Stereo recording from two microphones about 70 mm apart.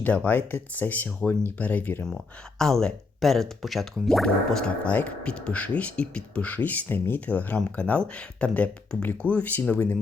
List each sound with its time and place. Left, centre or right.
0.0 s speech: left
2.0 s speech: centre
4.9 s speech: centre